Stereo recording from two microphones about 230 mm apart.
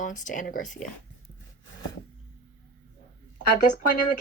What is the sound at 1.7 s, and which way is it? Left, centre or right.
Wood, left.